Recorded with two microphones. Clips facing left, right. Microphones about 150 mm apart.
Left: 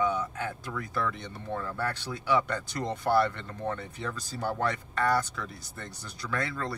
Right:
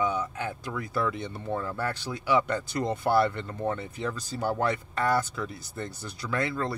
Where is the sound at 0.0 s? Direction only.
5° right (ahead or behind).